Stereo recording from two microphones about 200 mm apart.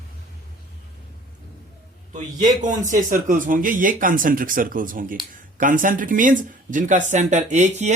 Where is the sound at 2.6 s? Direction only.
40° right (ahead or behind).